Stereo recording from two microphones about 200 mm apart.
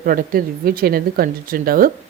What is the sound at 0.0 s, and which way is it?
A woman's voice, 45° right (ahead or behind).